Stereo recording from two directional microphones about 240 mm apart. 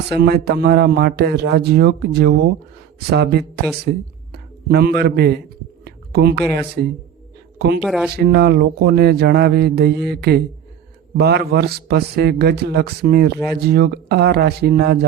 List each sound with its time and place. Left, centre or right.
0.1 s speech: right
5.8 s a sound: right
6.5 s speech: right
7.8 s speech: centre
8.1 s a man's voice: right